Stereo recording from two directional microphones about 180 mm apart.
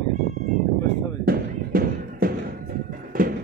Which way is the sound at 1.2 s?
55° right (ahead or behind).